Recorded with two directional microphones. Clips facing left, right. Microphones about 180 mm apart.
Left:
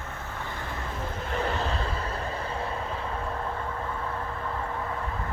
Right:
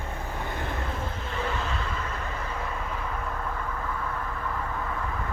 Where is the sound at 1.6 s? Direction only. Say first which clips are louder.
Left 2 dB; 35° left (ahead or behind).